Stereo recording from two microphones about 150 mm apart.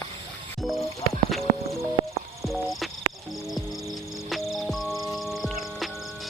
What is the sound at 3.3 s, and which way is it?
Cricket, centre (ahead or behind).